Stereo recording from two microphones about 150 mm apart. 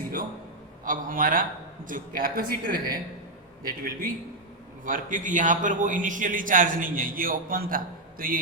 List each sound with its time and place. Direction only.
0.9 s a man's voice: 65° right (ahead or behind)
4.9 s a man's voice: 60° right (ahead or behind); by 8.4 s 75° right (ahead or behind)